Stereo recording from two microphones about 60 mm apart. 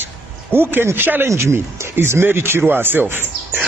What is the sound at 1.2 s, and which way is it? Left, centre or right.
Speech, right.